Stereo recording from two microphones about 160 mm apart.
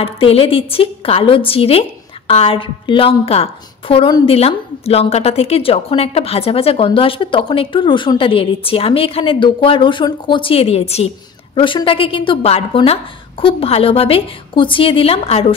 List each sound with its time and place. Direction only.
0.0 s a woman's voice: 35° left (ahead or behind)